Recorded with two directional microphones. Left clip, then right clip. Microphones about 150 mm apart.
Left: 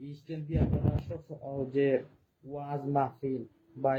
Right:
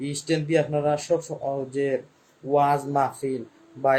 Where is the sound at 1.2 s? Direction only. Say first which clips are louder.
Right 12 dB; 35° right (ahead or behind).